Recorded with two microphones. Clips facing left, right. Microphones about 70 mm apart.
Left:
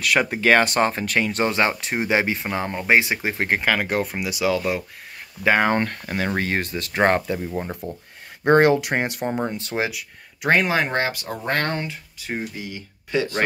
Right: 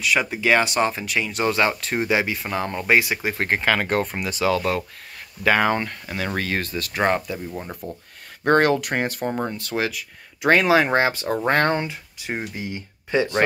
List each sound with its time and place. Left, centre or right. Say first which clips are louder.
0.0 s speech: left 2 dB; left
1.4 s speech: right 3 dB; left
3.4 s speech: even; centre
5.4 s speech: even; left
5.8 s speech: left 3 dB; left
9.8 s speech: right 1 dB; centre
10.9 s speech: right 4 dB; centre